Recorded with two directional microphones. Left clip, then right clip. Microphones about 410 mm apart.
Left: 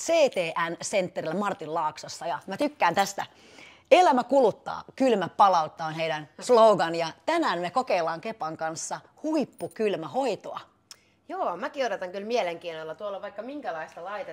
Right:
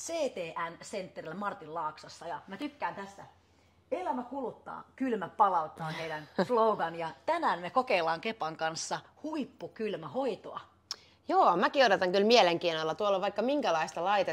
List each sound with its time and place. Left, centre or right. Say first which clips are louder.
0.0 s a woman's voice: left 12 dB; left
4.6 s speech: left 11 dB; left
10.9 s a woman's voice: right 6 dB; right